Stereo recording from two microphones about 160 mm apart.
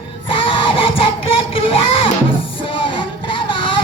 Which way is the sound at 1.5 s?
35° left (ahead or behind).